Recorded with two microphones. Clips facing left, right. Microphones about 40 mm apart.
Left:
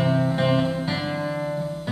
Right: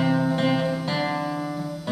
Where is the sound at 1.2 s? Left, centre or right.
Centre.